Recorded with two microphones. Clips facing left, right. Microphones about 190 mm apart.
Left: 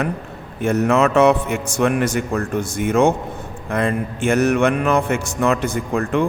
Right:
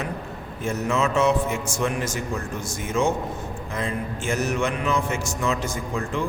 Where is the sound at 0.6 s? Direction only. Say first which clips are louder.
Left 8 dB; 65° left (ahead or behind).